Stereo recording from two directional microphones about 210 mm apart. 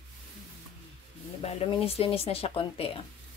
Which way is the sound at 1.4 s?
30° left (ahead or behind).